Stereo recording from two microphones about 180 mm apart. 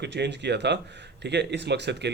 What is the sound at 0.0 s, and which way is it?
Speech, 70° right (ahead or behind).